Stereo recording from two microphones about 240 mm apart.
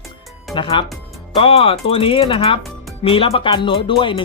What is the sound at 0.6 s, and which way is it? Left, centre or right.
Speech, left.